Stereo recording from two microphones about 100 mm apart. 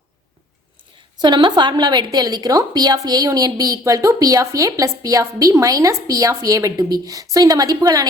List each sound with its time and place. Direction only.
1.2 s a woman's voice: 45° right (ahead or behind)